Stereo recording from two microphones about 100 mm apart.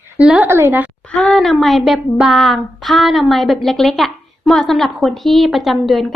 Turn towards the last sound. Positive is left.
turn(degrees=0)  # may be behind; listen again after turning